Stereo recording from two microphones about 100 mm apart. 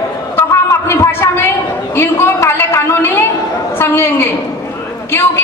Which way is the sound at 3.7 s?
25° left (ahead or behind).